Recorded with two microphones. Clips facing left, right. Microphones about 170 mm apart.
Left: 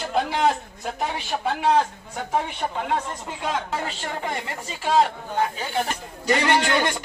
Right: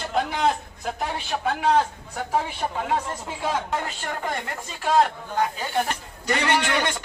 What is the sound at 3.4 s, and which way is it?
Speech, 5° right (ahead or behind).